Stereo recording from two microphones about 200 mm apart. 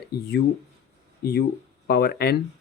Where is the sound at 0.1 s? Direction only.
55° left (ahead or behind).